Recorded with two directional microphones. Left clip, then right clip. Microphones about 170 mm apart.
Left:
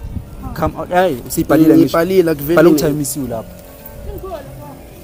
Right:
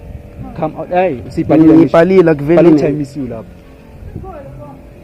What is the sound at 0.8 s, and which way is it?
Speech, 25° left (ahead or behind).